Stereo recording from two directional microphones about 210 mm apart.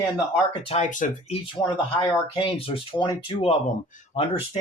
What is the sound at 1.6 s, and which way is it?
Speech, 15° left (ahead or behind).